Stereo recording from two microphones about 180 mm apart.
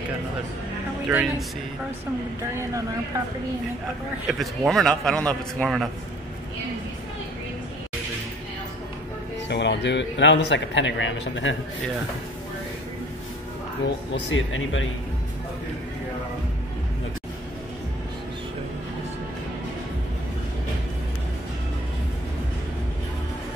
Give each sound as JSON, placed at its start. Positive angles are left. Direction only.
{"t": 1.0, "sound": "speech", "side_deg": -5}
{"t": 4.3, "sound": "a man's voice", "side_deg": 0}
{"t": 9.5, "sound": "speech", "side_deg": 75}
{"t": 14.1, "sound": "speech", "side_deg": 90}